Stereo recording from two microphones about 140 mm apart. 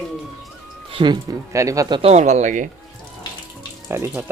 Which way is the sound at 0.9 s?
35° right (ahead or behind).